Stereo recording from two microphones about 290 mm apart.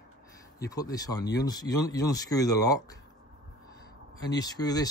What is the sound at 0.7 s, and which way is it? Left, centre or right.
Speech, centre.